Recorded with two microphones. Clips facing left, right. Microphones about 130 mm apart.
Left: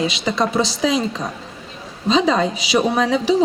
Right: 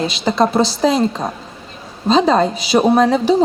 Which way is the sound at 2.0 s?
40° right (ahead or behind).